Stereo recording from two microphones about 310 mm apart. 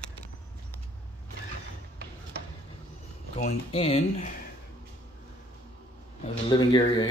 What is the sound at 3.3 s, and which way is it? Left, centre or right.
Speech, centre.